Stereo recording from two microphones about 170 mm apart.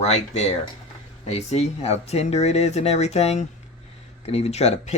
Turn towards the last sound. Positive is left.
turn(degrees=40)  # may be behind; listen again after turning